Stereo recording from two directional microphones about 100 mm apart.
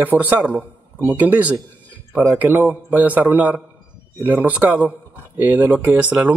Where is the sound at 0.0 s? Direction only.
15° right (ahead or behind).